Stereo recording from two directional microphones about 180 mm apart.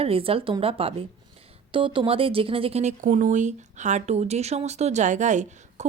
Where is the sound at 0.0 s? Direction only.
30° right (ahead or behind).